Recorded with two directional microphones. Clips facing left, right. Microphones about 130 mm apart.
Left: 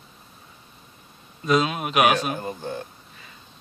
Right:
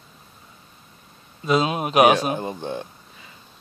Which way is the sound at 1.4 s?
30° right (ahead or behind).